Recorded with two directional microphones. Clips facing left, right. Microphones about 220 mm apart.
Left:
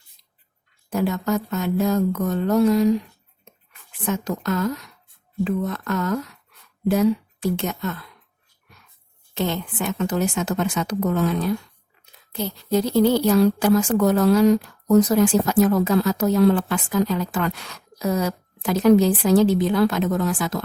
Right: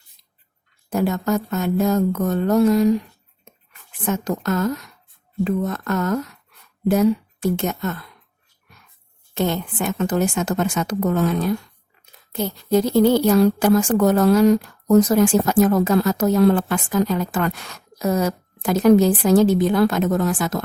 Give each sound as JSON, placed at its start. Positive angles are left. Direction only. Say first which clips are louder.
{"t": 0.9, "sound": "a woman's voice", "louder": "right 2 dB", "side_deg": -45}
{"t": 4.0, "sound": "a woman's voice", "louder": "right 2 dB", "side_deg": -45}
{"t": 9.3, "sound": "a woman's voice", "louder": "right 3 dB", "side_deg": -50}